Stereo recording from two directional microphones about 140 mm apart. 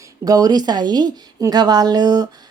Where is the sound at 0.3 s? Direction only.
25° right (ahead or behind).